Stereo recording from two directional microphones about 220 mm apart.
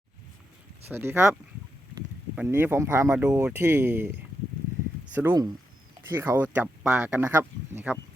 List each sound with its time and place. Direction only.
0.9 s speech: 10° right (ahead or behind)